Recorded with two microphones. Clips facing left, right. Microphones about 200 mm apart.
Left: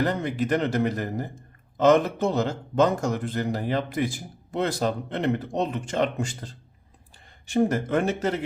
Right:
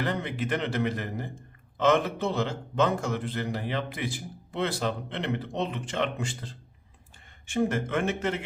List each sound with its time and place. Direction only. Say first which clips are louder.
0.0 s a man's voice: left 5 dB; 40° left (ahead or behind)